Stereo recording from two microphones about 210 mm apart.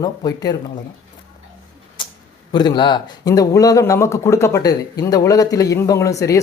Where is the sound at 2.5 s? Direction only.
20° left (ahead or behind).